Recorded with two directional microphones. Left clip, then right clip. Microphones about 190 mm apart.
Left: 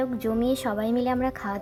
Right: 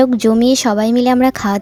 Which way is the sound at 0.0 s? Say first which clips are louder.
Right 14 dB; 40° right (ahead or behind).